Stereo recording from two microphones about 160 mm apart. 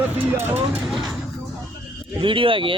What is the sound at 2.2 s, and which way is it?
Speech, 35° right (ahead or behind).